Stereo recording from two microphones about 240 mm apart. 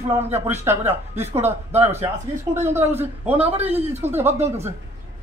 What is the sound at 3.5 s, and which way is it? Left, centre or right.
Speech, right.